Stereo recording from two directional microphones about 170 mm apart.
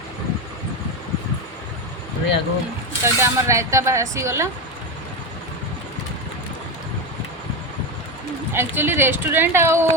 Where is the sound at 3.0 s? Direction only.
15° right (ahead or behind).